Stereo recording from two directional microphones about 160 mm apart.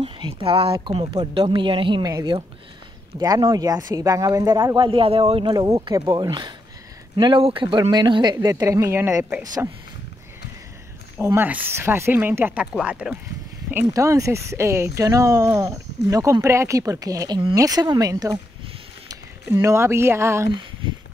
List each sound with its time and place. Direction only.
0.0 s speech: 35° right (ahead or behind); by 9.7 s 20° right (ahead or behind)
11.1 s speech: 15° right (ahead or behind)